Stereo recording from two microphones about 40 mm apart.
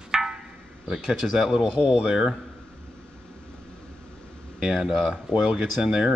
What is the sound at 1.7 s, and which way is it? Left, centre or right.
Speech, right.